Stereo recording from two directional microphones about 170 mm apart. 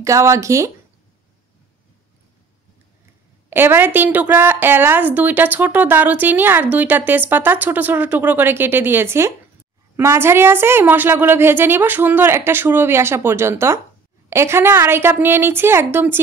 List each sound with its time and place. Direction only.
0.0 s a woman's voice: 20° right (ahead or behind)
3.4 s a woman's voice: 15° right (ahead or behind)